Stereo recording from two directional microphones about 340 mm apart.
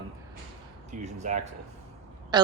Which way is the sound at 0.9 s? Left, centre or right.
Right.